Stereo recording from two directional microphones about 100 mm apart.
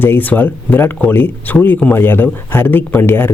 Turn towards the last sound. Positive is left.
turn(degrees=25)  # may be behind; listen again after turning